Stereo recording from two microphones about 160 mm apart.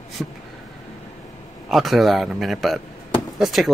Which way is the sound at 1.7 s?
Centre (ahead or behind).